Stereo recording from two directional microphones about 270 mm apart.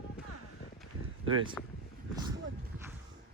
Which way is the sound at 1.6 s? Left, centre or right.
Centre.